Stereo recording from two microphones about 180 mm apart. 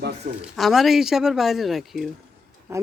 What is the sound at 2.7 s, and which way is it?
Speech, 15° right (ahead or behind).